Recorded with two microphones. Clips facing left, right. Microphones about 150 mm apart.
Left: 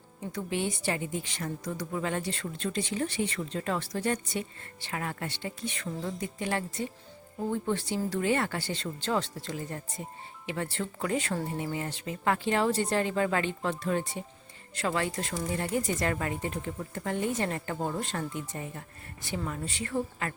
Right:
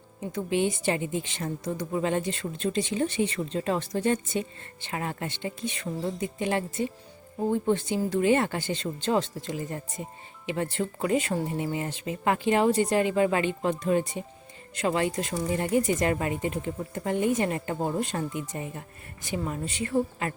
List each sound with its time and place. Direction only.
0.3 s speech: 20° right (ahead or behind)